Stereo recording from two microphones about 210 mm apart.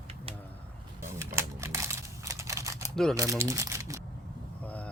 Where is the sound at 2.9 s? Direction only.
Centre (ahead or behind).